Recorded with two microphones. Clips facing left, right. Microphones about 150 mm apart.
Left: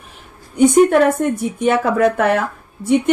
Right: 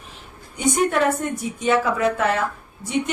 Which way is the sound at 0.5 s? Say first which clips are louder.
Left 9 dB; 55° left (ahead or behind).